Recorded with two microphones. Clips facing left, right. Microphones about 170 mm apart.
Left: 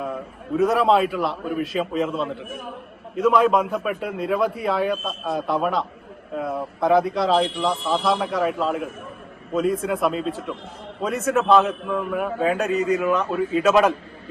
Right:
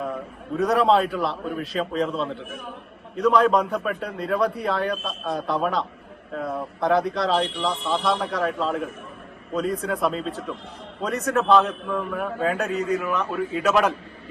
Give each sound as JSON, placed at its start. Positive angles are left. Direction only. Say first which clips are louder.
{"t": 0.5, "sound": "a man's voice", "louder": "left 1 dB", "side_deg": 0}
{"t": 13.0, "sound": "speech", "louder": "left 4 dB", "side_deg": 25}